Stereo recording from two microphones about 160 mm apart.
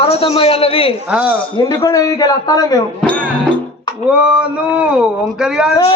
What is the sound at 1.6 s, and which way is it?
A man's voice, 20° left (ahead or behind).